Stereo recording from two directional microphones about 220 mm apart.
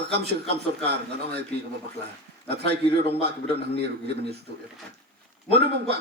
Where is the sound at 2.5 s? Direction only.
50° right (ahead or behind).